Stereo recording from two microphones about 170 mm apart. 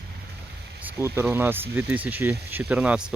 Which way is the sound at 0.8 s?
15° right (ahead or behind).